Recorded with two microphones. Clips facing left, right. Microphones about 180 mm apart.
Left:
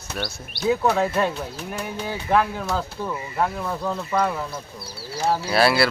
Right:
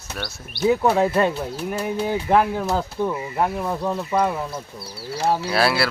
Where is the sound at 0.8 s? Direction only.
15° right (ahead or behind).